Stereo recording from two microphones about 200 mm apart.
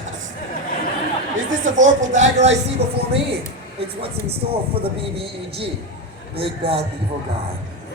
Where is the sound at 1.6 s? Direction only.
40° right (ahead or behind).